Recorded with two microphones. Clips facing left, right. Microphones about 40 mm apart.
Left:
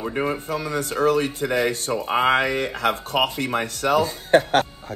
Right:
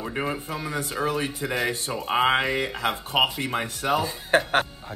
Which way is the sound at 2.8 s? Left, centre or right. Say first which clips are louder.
Left 4 dB; left.